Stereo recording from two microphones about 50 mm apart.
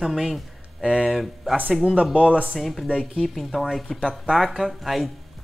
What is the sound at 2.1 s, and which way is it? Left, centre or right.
Speech, right.